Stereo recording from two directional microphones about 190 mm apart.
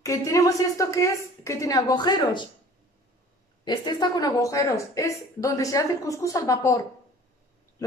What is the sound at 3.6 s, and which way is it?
A woman's voice, 25° left (ahead or behind).